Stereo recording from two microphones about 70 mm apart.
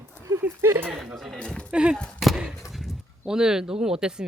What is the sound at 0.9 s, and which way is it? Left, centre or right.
Speech, centre.